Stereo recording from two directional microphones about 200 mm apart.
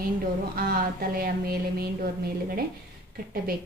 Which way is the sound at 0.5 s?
50° right (ahead or behind).